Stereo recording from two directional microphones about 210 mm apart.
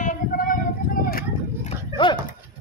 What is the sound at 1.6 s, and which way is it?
Horse, 20° left (ahead or behind).